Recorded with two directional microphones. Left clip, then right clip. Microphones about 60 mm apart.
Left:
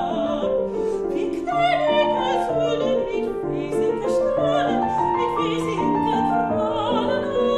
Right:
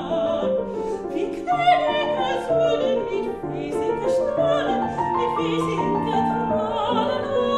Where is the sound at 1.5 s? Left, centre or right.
Left.